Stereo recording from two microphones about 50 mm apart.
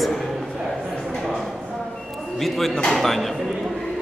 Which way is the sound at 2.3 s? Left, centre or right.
Centre.